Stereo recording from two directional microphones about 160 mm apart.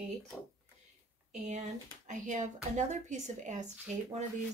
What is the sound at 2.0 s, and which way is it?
Speech, 50° right (ahead or behind).